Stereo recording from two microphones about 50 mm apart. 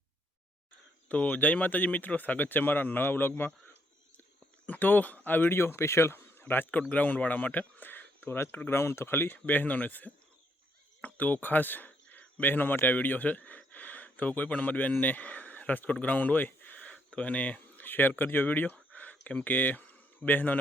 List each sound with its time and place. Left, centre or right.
1.0 s speech: left
4.6 s speech: left
5.5 s speech: left
6.9 s speech: left
8.8 s speech: left
11.9 s cricket: left
12.8 s speech: left
16.8 s a sound: left
18.2 s speech: left
19.5 s speech: left